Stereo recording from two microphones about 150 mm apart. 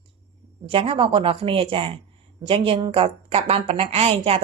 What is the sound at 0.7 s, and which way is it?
A woman's voice, 35° right (ahead or behind).